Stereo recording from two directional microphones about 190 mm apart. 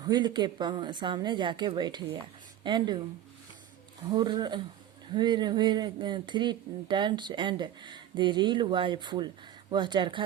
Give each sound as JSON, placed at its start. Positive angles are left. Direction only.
{"t": 0.0, "sound": "speech", "side_deg": -20}
{"t": 4.1, "sound": "speech", "side_deg": -20}